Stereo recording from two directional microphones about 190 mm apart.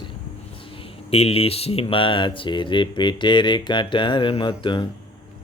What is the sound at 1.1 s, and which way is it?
Speech, 30° left (ahead or behind).